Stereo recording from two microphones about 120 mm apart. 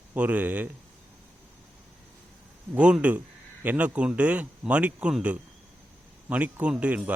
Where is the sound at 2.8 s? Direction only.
10° right (ahead or behind).